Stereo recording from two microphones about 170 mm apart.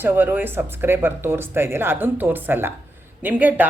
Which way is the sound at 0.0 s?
10° right (ahead or behind).